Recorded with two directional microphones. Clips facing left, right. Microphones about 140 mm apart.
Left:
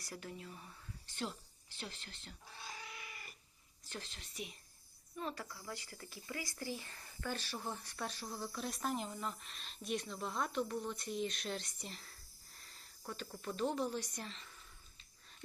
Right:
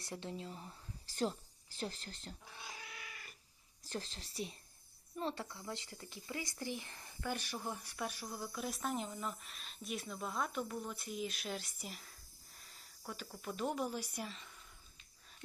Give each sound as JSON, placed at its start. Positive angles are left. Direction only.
{"t": 0.0, "sound": "speech", "side_deg": -25}
{"t": 2.8, "sound": "cat", "side_deg": 0}
{"t": 3.8, "sound": "speech", "side_deg": -35}
{"t": 8.3, "sound": "speech", "side_deg": 0}